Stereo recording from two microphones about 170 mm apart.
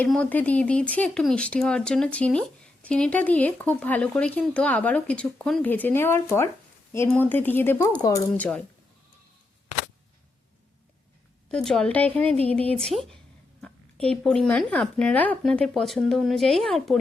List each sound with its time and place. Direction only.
0.0 s speech: 10° left (ahead or behind)
8.3 s speech: 5° left (ahead or behind)
11.5 s speech: 5° left (ahead or behind)